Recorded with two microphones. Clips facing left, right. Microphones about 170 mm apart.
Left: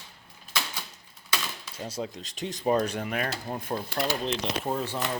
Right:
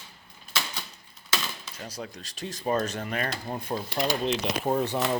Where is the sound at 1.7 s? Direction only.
25° left (ahead or behind); by 4.0 s centre (ahead or behind).